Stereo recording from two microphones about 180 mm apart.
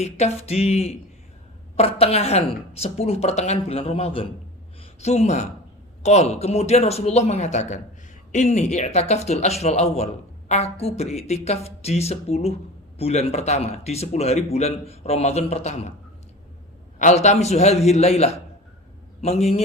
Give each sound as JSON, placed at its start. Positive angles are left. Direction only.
{"t": 0.0, "sound": "speech", "side_deg": 35}
{"t": 17.0, "sound": "speech", "side_deg": 40}